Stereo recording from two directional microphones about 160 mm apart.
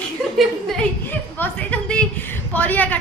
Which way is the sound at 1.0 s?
10° left (ahead or behind).